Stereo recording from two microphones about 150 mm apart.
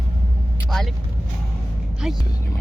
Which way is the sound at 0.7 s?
Centre (ahead or behind).